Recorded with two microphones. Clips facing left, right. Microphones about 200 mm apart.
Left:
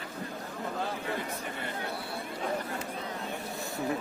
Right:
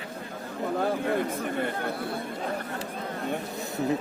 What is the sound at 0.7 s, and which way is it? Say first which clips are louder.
A man's voice: right 9 dB; 55° right (ahead or behind).